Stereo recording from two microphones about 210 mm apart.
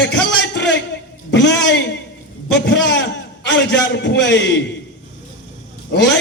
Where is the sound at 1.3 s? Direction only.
60° left (ahead or behind).